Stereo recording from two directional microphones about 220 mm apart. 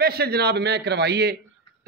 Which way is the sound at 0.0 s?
45° right (ahead or behind).